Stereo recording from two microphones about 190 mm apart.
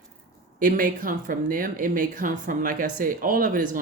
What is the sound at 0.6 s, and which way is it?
Speech, 45° right (ahead or behind).